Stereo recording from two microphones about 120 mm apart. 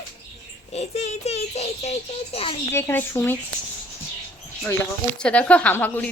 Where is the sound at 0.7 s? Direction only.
65° left (ahead or behind).